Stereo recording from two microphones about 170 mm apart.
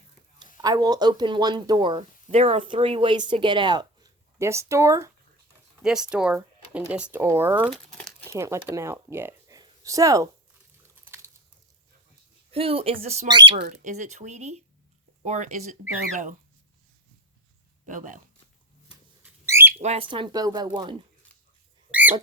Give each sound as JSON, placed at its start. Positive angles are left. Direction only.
{"t": 0.3, "sound": "speech", "side_deg": -20}
{"t": 5.8, "sound": "speech", "side_deg": -5}
{"t": 7.7, "sound": "crumpling", "side_deg": 0}
{"t": 8.3, "sound": "speech", "side_deg": -15}
{"t": 11.0, "sound": "biting", "side_deg": -15}
{"t": 12.5, "sound": "speech", "side_deg": -35}
{"t": 13.8, "sound": "speech", "side_deg": -45}
{"t": 17.8, "sound": "speech", "side_deg": -50}
{"t": 18.9, "sound": "a sound", "side_deg": -10}
{"t": 19.8, "sound": "speech", "side_deg": -35}